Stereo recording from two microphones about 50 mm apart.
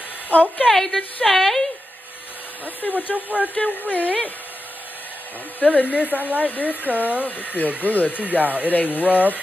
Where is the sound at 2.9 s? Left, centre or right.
Right.